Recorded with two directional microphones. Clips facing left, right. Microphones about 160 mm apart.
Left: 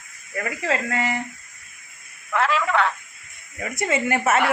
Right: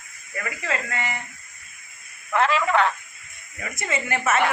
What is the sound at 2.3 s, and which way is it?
Speech, centre (ahead or behind).